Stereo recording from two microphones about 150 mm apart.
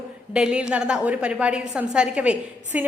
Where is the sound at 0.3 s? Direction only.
5° right (ahead or behind).